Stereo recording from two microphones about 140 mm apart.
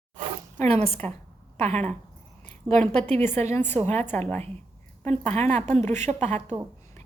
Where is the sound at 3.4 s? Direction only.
15° left (ahead or behind).